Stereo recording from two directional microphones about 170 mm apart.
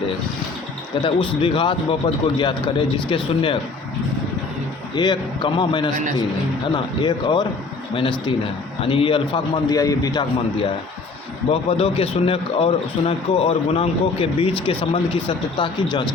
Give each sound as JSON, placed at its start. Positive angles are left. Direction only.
{"t": 1.0, "sound": "a man's voice", "side_deg": 30}
{"t": 4.9, "sound": "a man's voice", "side_deg": 25}
{"t": 9.7, "sound": "a man's voice", "side_deg": 20}
{"t": 11.5, "sound": "a man's voice", "side_deg": 35}